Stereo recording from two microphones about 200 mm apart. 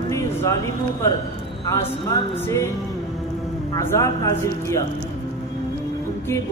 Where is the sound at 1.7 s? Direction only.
15° left (ahead or behind).